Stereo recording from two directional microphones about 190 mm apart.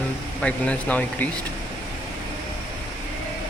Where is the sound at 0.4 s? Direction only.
5° left (ahead or behind).